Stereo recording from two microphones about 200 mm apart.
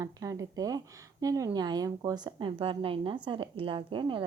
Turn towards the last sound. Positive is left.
turn(degrees=-25)  # may be behind; listen again after turning